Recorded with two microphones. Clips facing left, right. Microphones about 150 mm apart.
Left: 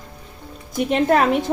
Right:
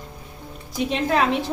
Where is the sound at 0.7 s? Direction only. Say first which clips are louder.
Left 4 dB; 50° left (ahead or behind).